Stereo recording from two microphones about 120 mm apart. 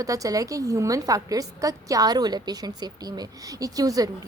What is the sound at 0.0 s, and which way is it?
A woman's voice, 30° right (ahead or behind).